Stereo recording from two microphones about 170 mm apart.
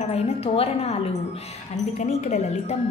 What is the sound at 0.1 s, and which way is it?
Speech, 35° left (ahead or behind).